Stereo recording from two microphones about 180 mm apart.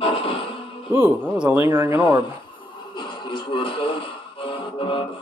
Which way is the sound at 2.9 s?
25° left (ahead or behind).